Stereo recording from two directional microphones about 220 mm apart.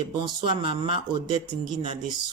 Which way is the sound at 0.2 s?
20° right (ahead or behind).